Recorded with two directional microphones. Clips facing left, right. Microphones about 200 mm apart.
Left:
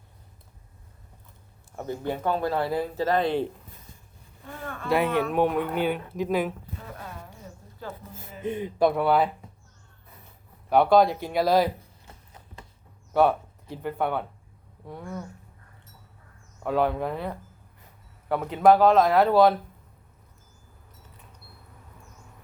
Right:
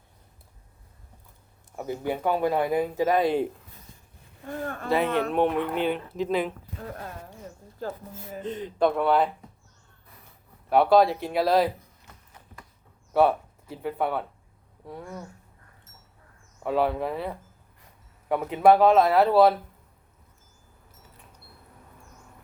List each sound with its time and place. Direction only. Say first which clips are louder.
1.7 s speech: right 1 dB; 10° right (ahead or behind)
4.4 s speech: right 5 dB; 40° right (ahead or behind)
5.3 s speech: even; 5° left (ahead or behind)
8.4 s speech: left 1 dB; 10° left (ahead or behind)
10.7 s speech: even; centre (ahead or behind)
12.1 s a sound: left 3 dB; 30° left (ahead or behind)
13.1 s speech: even; centre (ahead or behind)
16.6 s speech: even; centre (ahead or behind)